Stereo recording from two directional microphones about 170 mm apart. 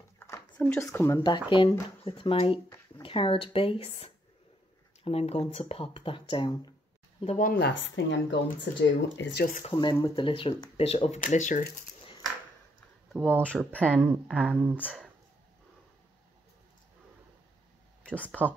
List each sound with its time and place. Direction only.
0.2 s speech: 15° left (ahead or behind)
7.3 s speech: 65° left (ahead or behind); by 9.5 s 80° left
9.7 s speech: 25° left (ahead or behind)
11.1 s speech: 45° left (ahead or behind)
13.1 s speech: 5° right (ahead or behind)
18.1 s speech: 10° left (ahead or behind)